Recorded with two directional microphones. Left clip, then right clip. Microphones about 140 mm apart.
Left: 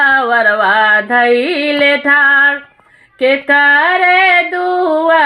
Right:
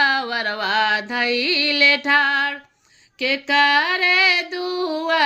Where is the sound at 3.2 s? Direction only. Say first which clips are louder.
Left 8 dB; 20° right (ahead or behind).